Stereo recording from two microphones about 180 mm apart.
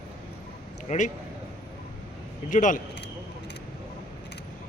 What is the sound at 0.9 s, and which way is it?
Speech, 40° left (ahead or behind).